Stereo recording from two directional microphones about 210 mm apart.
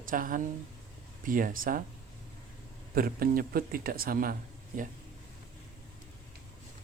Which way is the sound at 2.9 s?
45° right (ahead or behind).